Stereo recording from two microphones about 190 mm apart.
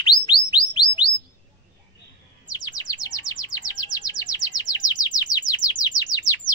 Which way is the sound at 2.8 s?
20° left (ahead or behind).